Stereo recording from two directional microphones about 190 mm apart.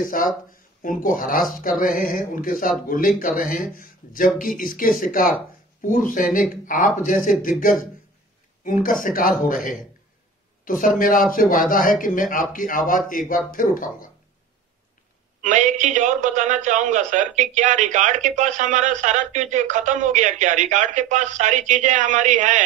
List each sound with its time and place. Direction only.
0.0 s speech: 45° left (ahead or behind)
9.0 s speech: 45° left (ahead or behind)
10.6 s a sound: 45° left (ahead or behind)
11.0 s speech: 45° left (ahead or behind)
15.4 s a man's voice: 40° right (ahead or behind)